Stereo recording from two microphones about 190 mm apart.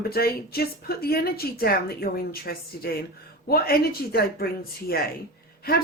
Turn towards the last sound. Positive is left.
turn(degrees=55)  # may be behind; listen again after turning